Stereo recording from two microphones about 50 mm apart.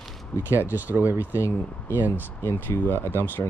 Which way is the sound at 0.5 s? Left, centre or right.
Right.